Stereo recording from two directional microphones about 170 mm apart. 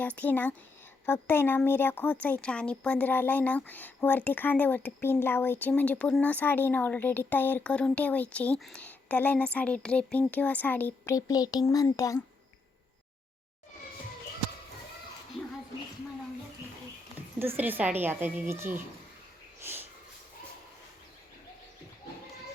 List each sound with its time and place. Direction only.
0.0 s a child's voice: 10° left (ahead or behind)
17.6 s a woman's voice: 10° right (ahead or behind)
19.6 s sniff: 10° right (ahead or behind)